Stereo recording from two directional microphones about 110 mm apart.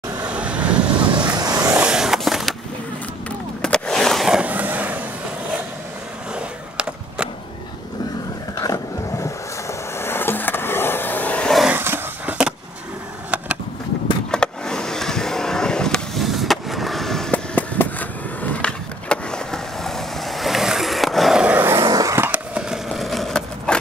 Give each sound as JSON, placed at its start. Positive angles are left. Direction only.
{"t": 0.2, "sound": "vehicle", "side_deg": -10}
{"t": 1.2, "sound": "vehicle", "side_deg": -35}
{"t": 1.8, "sound": "skateboard", "side_deg": -5}
{"t": 3.3, "sound": "a sound", "side_deg": 10}
{"t": 6.3, "sound": "skateboard", "side_deg": -10}
{"t": 8.6, "sound": "skateboard", "side_deg": 35}
{"t": 9.2, "sound": "vehicle", "side_deg": 25}
{"t": 11.7, "sound": "a sound", "side_deg": -20}
{"t": 14.3, "sound": "vehicle", "side_deg": 5}
{"t": 17.6, "sound": "skateboard", "side_deg": 15}
{"t": 21.5, "sound": "vehicle", "side_deg": -20}
{"t": 21.9, "sound": "skateboard", "side_deg": -30}
{"t": 22.3, "sound": "a sound", "side_deg": -10}